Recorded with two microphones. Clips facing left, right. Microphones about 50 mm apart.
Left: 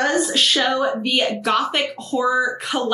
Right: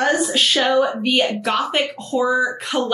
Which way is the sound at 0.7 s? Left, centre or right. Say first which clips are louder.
Right 3 dB; centre.